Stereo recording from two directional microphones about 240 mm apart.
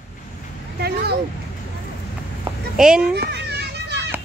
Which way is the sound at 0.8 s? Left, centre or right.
Right.